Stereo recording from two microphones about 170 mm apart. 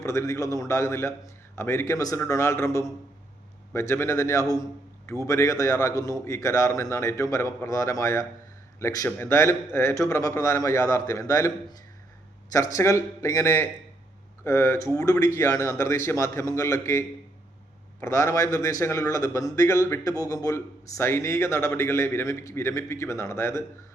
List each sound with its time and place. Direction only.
0.0 s a man's voice: 15° left (ahead or behind)